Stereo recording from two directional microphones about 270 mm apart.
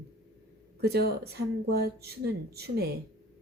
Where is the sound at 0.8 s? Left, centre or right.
Right.